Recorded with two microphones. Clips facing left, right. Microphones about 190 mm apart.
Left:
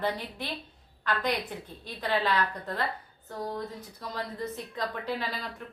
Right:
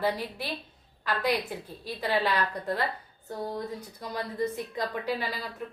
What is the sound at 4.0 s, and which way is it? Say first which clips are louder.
A woman's voice: right 4 dB; 10° right (ahead or behind).